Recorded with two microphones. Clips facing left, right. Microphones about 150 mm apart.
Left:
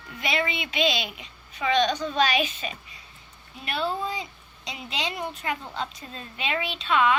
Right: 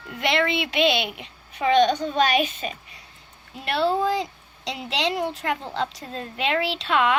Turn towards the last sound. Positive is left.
turn(degrees=-75)  # may be behind; listen again after turning